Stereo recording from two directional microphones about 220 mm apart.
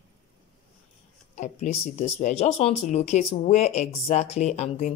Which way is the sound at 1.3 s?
35° left (ahead or behind).